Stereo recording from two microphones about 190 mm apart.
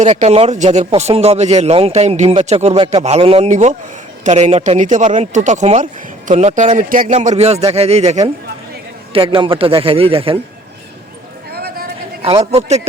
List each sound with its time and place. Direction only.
0.0 s a man's voice: 35° right (ahead or behind)
11.5 s a sound: 50° right (ahead or behind)
12.2 s speech: 30° right (ahead or behind)